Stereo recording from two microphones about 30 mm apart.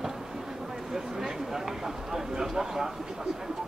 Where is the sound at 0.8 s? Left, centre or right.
Centre.